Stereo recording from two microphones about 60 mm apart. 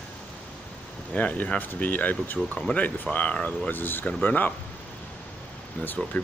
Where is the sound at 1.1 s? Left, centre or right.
Left.